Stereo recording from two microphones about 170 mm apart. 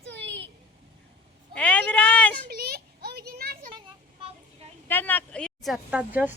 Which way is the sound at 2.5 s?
65° right (ahead or behind).